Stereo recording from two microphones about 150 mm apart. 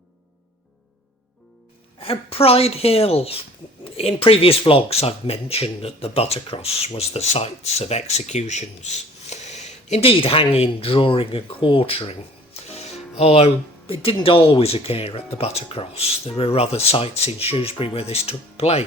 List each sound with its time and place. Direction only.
2.0 s speech: 40° left (ahead or behind)